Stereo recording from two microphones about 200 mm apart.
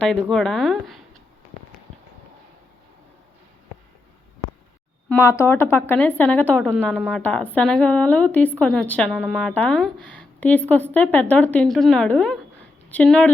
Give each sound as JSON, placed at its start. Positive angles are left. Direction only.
{"t": 0.1, "sound": "a woman's voice", "side_deg": 0}
{"t": 5.0, "sound": "speech", "side_deg": 10}